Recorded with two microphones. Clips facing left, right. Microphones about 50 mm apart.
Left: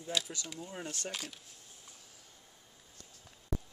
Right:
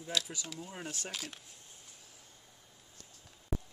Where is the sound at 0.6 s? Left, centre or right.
Centre.